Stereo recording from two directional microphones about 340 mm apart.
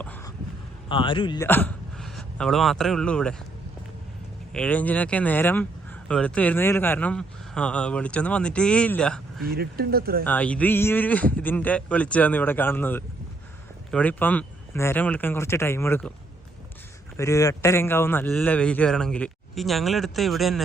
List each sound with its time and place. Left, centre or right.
0.0 s speech: centre
4.5 s speech: centre
9.5 s speech: right
10.2 s speech: centre
17.2 s speech: centre